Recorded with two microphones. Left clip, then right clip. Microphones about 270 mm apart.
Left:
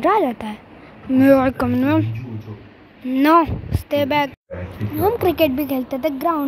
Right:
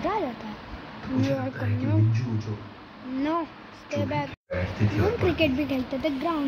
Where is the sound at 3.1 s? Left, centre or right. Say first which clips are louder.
Left 14 dB; left.